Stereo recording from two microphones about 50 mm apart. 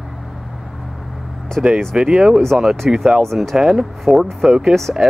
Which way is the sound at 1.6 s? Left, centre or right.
Right.